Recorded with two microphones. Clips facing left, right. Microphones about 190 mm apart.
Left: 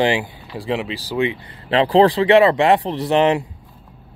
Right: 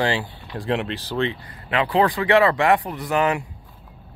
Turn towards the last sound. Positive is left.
turn(degrees=25)  # may be behind; listen again after turning